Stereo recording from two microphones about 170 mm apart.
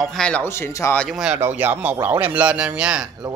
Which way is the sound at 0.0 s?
5° left (ahead or behind).